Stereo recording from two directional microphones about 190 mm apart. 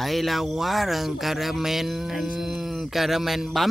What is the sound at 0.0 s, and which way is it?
Speech, centre (ahead or behind).